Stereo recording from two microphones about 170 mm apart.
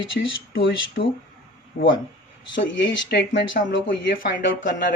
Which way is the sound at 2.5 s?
90° left.